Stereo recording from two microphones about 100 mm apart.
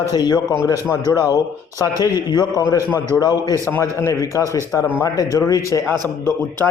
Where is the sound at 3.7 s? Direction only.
25° left (ahead or behind).